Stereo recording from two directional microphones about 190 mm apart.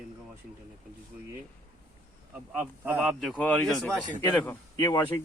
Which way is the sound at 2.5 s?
10° right (ahead or behind).